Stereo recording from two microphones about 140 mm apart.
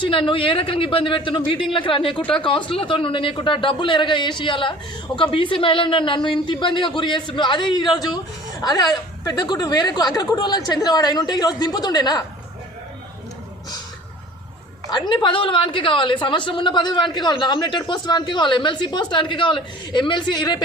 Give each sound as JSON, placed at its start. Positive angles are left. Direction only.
{"t": 0.0, "sound": "a woman's voice", "side_deg": 40}
{"t": 14.8, "sound": "a woman's voice", "side_deg": 35}